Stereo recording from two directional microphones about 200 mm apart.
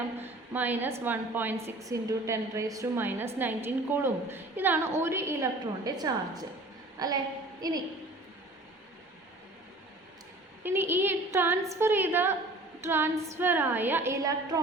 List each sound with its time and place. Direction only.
0.2 s a woman's voice: 10° right (ahead or behind)
10.6 s a woman's voice: 10° right (ahead or behind)